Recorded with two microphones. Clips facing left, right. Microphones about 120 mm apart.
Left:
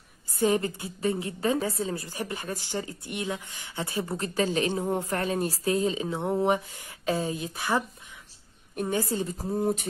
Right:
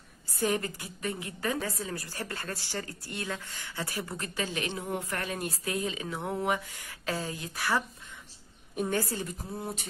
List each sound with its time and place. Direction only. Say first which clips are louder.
0.4 s a woman's voice: left 5 dB; 25° left (ahead or behind)
8.9 s a woman's voice: left 6 dB; 20° left (ahead or behind)
9.4 s speech: left 10 dB; 35° left (ahead or behind)